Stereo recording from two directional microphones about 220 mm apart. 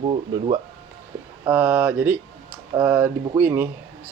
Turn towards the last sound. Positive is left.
turn(degrees=-10)  # may be behind; listen again after turning